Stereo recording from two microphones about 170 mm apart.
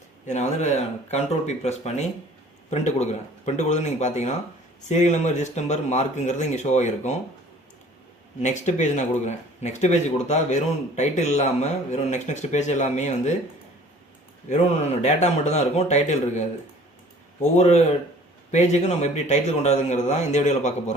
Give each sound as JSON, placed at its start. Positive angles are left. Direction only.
{"t": 0.3, "sound": "a man's voice", "side_deg": 40}
{"t": 8.4, "sound": "speech", "side_deg": 45}
{"t": 14.5, "sound": "a man's voice", "side_deg": 40}
{"t": 17.6, "sound": "a man's voice", "side_deg": 40}